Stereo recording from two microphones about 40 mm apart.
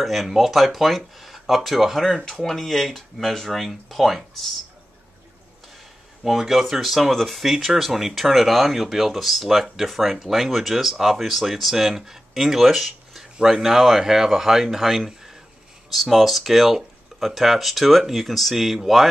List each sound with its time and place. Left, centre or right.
0.0 s speech: centre
6.2 s speech: centre